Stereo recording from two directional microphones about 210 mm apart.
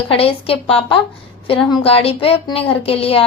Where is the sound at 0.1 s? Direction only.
25° left (ahead or behind).